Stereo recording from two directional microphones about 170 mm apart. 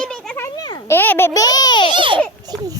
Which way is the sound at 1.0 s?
15° left (ahead or behind).